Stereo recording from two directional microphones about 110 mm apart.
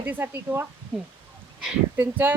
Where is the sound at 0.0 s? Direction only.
20° right (ahead or behind).